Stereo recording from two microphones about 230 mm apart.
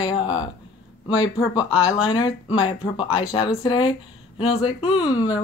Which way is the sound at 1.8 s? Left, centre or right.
Centre.